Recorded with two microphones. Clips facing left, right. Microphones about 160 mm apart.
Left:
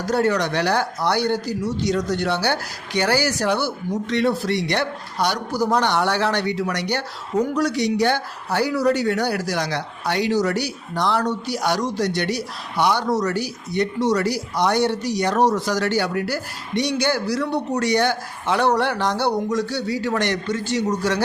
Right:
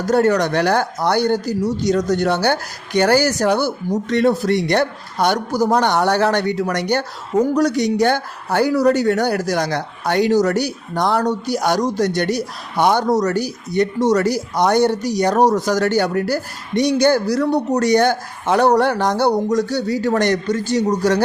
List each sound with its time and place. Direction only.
0.0 s a man's voice: 45° right (ahead or behind)